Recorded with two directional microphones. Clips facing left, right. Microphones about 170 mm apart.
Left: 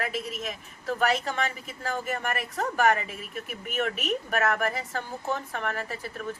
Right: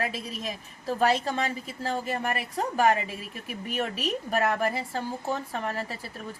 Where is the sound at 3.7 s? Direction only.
30° right (ahead or behind).